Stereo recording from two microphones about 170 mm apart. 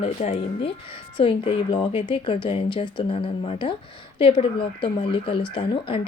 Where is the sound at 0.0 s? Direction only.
35° left (ahead or behind).